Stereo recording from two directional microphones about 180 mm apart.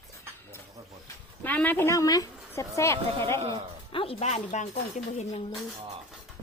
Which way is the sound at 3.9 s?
30° left (ahead or behind).